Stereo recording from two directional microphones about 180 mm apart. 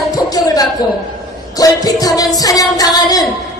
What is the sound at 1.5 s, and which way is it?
A woman's voice, 20° left (ahead or behind).